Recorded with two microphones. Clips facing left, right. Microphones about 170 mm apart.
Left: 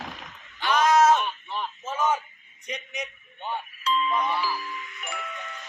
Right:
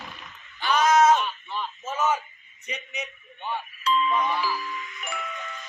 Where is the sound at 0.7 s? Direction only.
Centre (ahead or behind).